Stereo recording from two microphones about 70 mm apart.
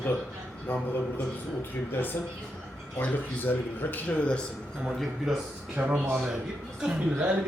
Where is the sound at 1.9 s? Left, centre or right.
Left.